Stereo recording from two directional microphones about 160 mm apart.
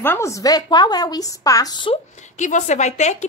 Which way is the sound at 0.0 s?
15° left (ahead or behind).